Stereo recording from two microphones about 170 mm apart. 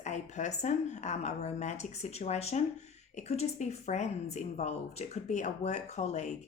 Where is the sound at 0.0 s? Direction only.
45° left (ahead or behind).